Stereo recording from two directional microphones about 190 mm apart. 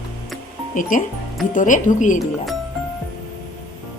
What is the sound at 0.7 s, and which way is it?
A woman's voice, 45° left (ahead or behind).